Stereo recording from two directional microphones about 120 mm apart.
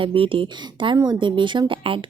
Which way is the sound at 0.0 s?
45° right (ahead or behind).